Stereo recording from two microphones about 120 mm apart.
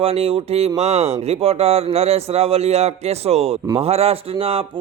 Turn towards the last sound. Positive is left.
turn(degrees=-50)  # may be behind; listen again after turning